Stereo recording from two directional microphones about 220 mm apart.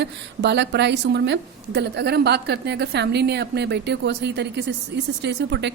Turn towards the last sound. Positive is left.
turn(degrees=-50)  # may be behind; listen again after turning